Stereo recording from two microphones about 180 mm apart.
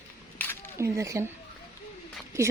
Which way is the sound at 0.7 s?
15° right (ahead or behind).